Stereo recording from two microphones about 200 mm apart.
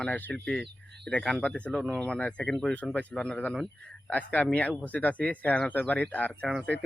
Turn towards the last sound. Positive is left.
turn(degrees=0)  # may be behind; listen again after turning